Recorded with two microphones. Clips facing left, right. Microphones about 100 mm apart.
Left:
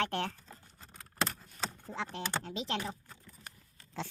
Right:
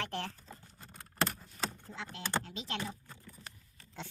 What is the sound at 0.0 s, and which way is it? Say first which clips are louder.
Typing: left 5 dB; 70° left (ahead or behind).